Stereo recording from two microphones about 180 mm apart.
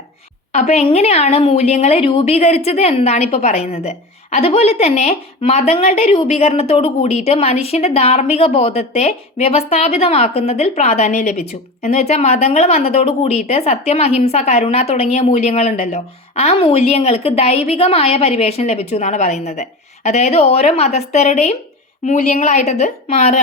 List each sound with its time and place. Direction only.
0.5 s a woman's voice: 40° left (ahead or behind)